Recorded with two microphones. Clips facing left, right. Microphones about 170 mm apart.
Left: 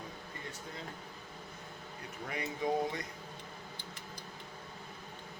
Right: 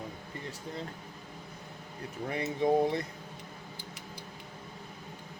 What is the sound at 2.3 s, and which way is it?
Speech, 30° right (ahead or behind).